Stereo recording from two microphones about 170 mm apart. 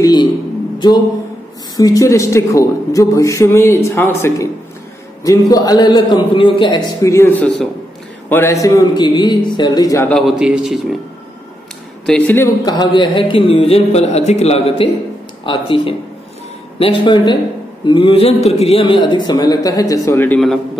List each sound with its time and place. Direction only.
0.0 s a sound: 25° left (ahead or behind)
0.7 s speech: 25° left (ahead or behind)
5.5 s a man's voice: 20° left (ahead or behind)
10.0 s a man's voice: centre (ahead or behind)
12.1 s speech: 10° left (ahead or behind)
12.6 s a man's voice: 25° left (ahead or behind)